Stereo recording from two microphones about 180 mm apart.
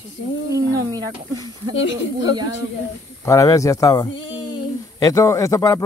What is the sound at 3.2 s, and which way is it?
Speech, 20° left (ahead or behind).